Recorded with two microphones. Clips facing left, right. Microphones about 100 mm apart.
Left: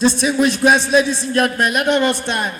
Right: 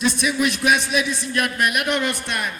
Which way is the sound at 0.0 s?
30° left (ahead or behind).